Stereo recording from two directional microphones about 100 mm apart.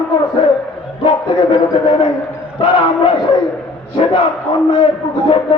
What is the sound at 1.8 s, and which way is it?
Dog, 55° left (ahead or behind).